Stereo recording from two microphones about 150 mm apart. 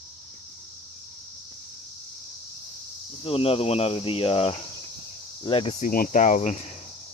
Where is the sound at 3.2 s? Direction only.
40° left (ahead or behind).